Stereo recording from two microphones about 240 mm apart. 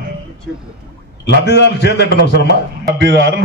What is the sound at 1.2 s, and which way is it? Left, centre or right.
A man's voice, left.